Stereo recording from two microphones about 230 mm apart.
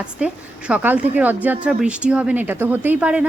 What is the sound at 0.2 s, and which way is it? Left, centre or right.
A woman's voice, centre.